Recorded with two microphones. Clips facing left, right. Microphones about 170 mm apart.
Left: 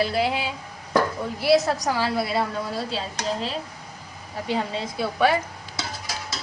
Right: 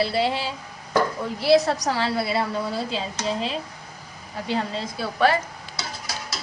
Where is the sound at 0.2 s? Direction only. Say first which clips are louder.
Even; 10° left (ahead or behind).